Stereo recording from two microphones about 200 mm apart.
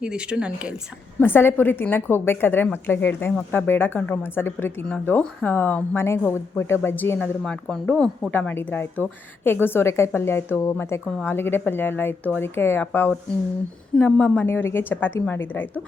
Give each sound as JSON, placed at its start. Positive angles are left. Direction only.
{"t": 0.0, "sound": "speech", "side_deg": -5}
{"t": 1.2, "sound": "a woman's voice", "side_deg": 10}